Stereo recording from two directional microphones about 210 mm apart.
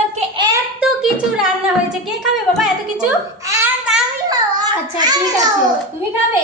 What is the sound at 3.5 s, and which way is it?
Child singing, 10° right (ahead or behind).